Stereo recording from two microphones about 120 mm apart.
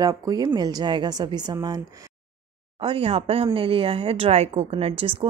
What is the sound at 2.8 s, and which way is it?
A woman's voice, 50° right (ahead or behind).